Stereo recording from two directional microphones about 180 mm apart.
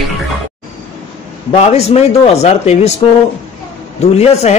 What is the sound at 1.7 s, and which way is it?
Speech, 35° left (ahead or behind).